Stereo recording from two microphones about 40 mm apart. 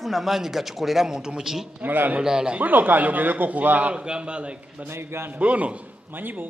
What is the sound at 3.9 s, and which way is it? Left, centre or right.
Speech, right.